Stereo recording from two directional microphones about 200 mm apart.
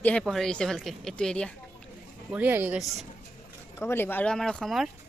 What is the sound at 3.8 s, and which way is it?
Speech, 10° left (ahead or behind).